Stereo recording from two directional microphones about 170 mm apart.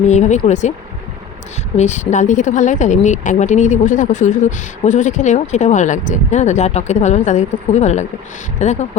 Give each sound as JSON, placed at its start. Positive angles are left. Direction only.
{"t": 0.1, "sound": "speech", "side_deg": 45}
{"t": 1.7, "sound": "speech", "side_deg": 45}